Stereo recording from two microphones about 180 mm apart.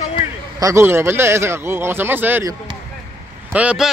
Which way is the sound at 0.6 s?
15° right (ahead or behind).